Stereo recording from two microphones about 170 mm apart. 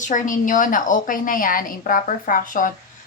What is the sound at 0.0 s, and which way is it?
A woman's voice, 50° left (ahead or behind).